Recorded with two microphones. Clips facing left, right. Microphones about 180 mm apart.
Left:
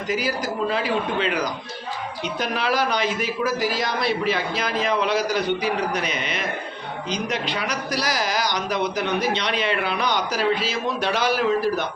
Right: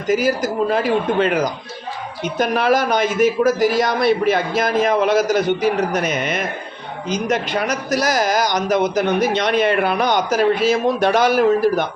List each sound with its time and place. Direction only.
0.1 s a man's voice: 45° right (ahead or behind)